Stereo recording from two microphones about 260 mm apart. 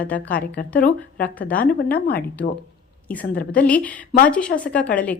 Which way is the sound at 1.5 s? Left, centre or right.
Left.